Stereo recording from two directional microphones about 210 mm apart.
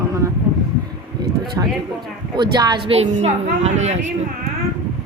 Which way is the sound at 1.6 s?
10° right (ahead or behind).